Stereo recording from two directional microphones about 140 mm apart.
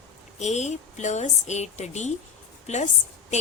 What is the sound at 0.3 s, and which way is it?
Speech, 55° left (ahead or behind).